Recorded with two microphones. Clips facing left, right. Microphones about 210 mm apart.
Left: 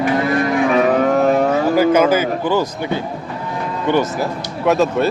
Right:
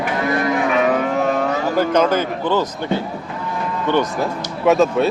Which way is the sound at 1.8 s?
5° left (ahead or behind).